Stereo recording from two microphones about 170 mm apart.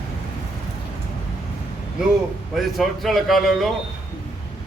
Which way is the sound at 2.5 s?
Centre (ahead or behind).